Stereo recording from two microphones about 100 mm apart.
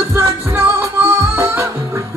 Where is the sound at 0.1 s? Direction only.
25° right (ahead or behind).